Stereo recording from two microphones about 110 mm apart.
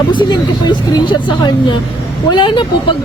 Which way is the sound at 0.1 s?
45° left (ahead or behind).